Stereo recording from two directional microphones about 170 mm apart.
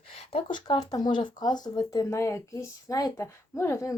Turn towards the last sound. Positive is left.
turn(degrees=15)  # may be behind; listen again after turning